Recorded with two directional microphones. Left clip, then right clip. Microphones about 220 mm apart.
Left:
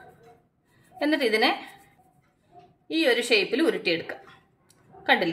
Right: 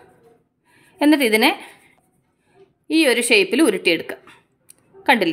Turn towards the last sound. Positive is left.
turn(degrees=-45)  # may be behind; listen again after turning